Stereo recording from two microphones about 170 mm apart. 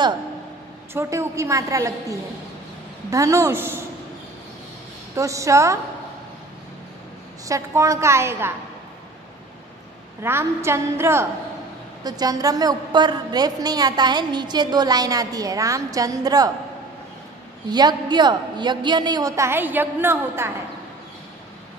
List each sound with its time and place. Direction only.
0.9 s a woman's voice: 15° right (ahead or behind)
5.1 s a woman's voice: 20° right (ahead or behind)
7.4 s a woman's voice: 20° right (ahead or behind)
10.2 s a woman's voice: 15° right (ahead or behind)
17.6 s a woman's voice: 25° right (ahead or behind)